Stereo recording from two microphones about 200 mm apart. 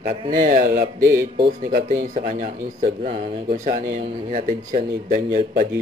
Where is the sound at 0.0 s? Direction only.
45° right (ahead or behind).